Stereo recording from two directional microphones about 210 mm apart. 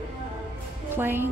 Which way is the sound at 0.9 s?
10° right (ahead or behind).